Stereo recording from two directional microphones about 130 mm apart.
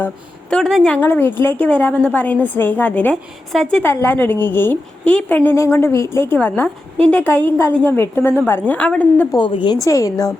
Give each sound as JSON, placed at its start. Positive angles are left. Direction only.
{"t": 0.5, "sound": "speech", "side_deg": 5}
{"t": 0.9, "sound": "a woman's voice", "side_deg": 15}
{"t": 9.3, "sound": "a woman's voice", "side_deg": 40}